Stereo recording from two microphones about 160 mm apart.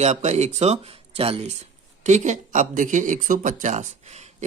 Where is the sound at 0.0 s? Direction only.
45° right (ahead or behind).